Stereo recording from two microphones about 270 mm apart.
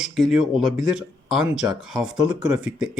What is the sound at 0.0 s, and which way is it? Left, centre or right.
Speech, centre.